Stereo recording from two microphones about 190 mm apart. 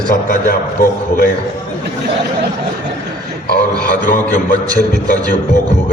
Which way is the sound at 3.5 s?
45° left (ahead or behind).